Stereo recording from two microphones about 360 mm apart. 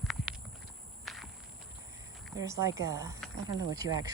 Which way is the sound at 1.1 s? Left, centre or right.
Centre.